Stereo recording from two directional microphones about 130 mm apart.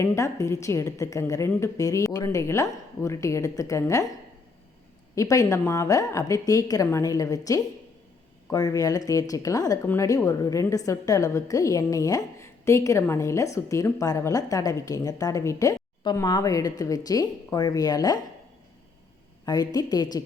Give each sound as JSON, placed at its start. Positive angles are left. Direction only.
{"t": 0.0, "sound": "a woman's voice", "side_deg": 20}
{"t": 5.1, "sound": "a woman's voice", "side_deg": 25}
{"t": 19.5, "sound": "a woman's voice", "side_deg": 30}